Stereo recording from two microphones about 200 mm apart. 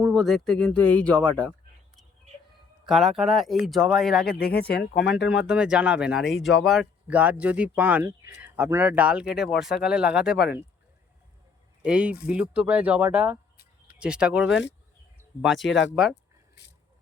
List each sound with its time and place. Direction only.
0.0 s speech: centre (ahead or behind)
2.8 s speech: centre (ahead or behind)
4.3 s speech: 50° left (ahead or behind)
5.3 s speech: 5° right (ahead or behind)
11.9 s speech: 5° right (ahead or behind)
14.5 s speech: 65° left (ahead or behind)
15.4 s speech: centre (ahead or behind)